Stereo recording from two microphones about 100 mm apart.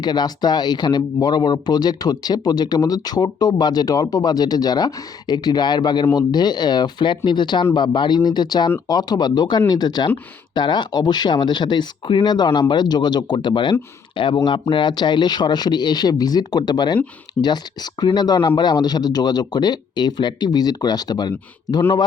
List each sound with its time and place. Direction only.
0.0 s a man's voice: 45° left (ahead or behind)
18.0 s a man's voice: 45° left (ahead or behind)